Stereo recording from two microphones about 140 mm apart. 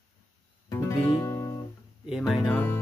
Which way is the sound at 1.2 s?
20° left (ahead or behind).